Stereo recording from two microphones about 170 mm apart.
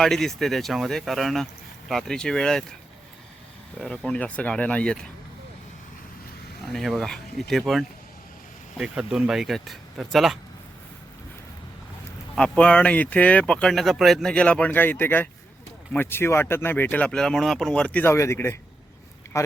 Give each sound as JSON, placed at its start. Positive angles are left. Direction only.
{"t": 0.0, "sound": "speech", "side_deg": 0}
{"t": 3.8, "sound": "speech", "side_deg": 5}
{"t": 6.7, "sound": "speech", "side_deg": 0}
{"t": 12.4, "sound": "speech", "side_deg": 5}